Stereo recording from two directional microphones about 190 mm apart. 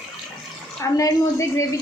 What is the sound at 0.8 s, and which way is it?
Speech, 15° left (ahead or behind).